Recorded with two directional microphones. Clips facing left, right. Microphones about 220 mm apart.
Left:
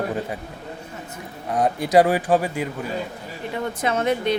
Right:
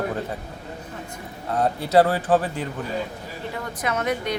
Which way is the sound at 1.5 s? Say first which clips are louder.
Left 2 dB; 15° left (ahead or behind).